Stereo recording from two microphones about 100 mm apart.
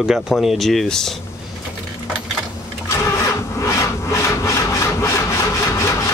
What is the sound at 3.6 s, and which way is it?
Rub, 30° left (ahead or behind).